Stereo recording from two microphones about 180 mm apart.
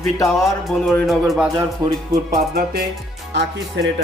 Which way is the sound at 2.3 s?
50° right (ahead or behind).